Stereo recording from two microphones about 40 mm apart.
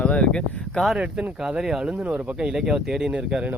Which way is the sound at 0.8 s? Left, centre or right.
Left.